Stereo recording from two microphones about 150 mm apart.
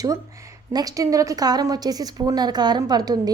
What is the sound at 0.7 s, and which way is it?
A woman's voice, 25° right (ahead or behind).